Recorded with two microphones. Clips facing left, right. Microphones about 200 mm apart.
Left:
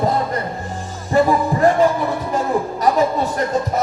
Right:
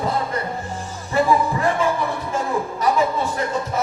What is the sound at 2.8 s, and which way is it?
Music, 40° left (ahead or behind).